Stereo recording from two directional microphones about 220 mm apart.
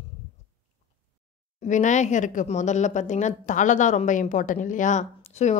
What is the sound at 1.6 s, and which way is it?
A woman's voice, 35° left (ahead or behind).